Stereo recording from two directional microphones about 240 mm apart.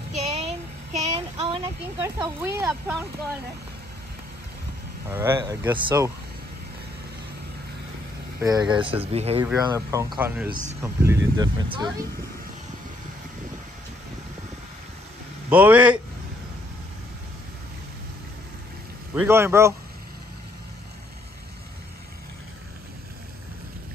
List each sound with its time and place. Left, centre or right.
0.1 s a sound: right
1.1 s speech: centre
5.1 s speech: centre
8.4 s speech: centre
9.5 s speech: centre
15.5 s a man's voice: centre
19.1 s speech: centre